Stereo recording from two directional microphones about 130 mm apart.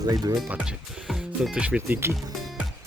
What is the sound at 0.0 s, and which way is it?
Speech, 30° right (ahead or behind).